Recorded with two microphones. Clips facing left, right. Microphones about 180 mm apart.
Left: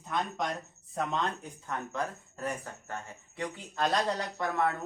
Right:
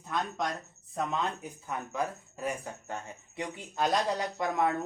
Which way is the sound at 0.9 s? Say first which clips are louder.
Even; 5° right (ahead or behind).